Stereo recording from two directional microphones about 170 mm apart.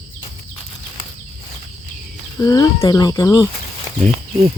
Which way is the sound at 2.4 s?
20° left (ahead or behind).